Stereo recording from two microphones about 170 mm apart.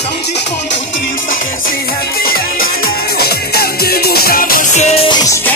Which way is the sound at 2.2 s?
60° left (ahead or behind).